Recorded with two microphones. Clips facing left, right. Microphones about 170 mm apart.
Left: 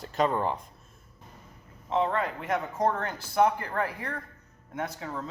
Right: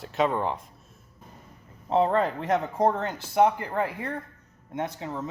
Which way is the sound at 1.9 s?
35° right (ahead or behind).